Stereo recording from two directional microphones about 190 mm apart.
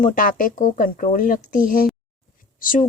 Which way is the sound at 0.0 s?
45° left (ahead or behind).